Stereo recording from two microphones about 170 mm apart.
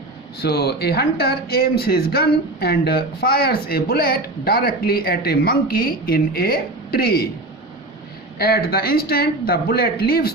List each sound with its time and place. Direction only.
0.4 s speech: 75° left (ahead or behind)
8.4 s speech: 65° left (ahead or behind)